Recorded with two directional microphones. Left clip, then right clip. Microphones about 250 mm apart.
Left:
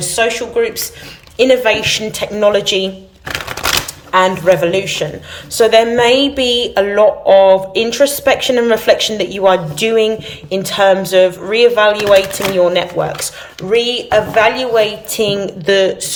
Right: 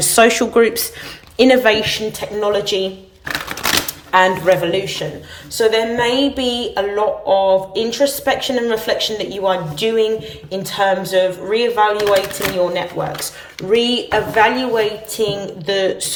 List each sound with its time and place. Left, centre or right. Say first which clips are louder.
0.0 s speech: right 3 dB; centre
4.1 s speech: left 2 dB; centre
4.8 s a woman's voice: left 4 dB; centre